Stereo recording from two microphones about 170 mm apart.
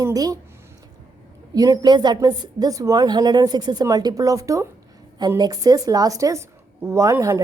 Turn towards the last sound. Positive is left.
turn(degrees=-20)  # may be behind; listen again after turning